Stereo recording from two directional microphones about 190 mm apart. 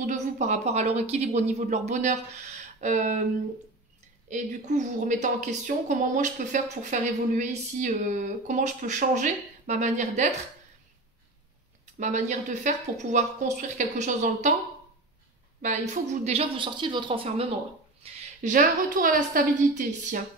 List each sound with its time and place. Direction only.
0.0 s speech: 40° right (ahead or behind)
4.3 s a woman's voice: 40° right (ahead or behind)
11.8 s a woman's voice: 40° right (ahead or behind)
15.6 s a woman's voice: 40° right (ahead or behind)
18.0 s a woman's voice: 40° right (ahead or behind)